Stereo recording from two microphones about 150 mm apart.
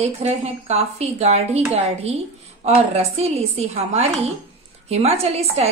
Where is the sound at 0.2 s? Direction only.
45° right (ahead or behind).